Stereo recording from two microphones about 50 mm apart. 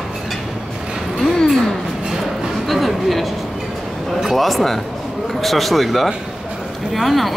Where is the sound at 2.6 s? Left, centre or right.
Centre.